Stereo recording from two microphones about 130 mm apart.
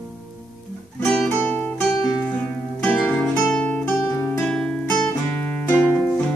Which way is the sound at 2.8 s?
10° left (ahead or behind).